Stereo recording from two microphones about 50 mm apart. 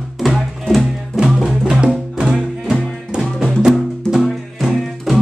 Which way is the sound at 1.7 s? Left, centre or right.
Centre.